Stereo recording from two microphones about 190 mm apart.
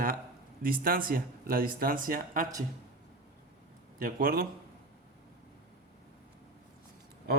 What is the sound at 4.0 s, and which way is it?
Speech, 50° right (ahead or behind).